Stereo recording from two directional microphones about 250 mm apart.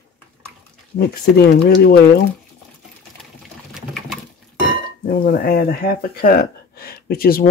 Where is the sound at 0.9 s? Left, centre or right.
Left.